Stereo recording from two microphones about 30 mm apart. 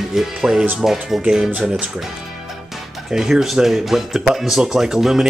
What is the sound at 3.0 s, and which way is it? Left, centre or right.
Speech, centre.